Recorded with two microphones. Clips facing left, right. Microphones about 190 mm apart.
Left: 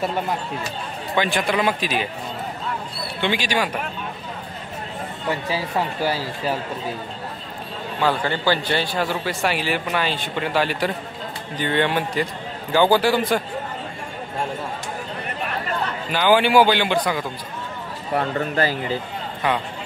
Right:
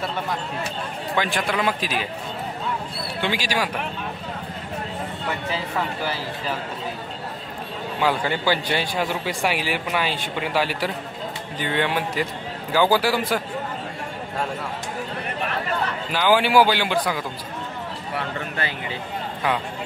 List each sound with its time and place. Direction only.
1.1 s a man's voice: centre (ahead or behind)
3.2 s a man's voice: 5° right (ahead or behind)
8.0 s a man's voice: 10° right (ahead or behind)
16.1 s a man's voice: centre (ahead or behind)
18.1 s speech: 40° left (ahead or behind)